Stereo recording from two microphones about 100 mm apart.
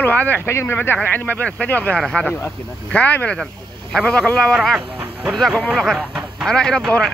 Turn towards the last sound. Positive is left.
turn(degrees=5)  # may be behind; listen again after turning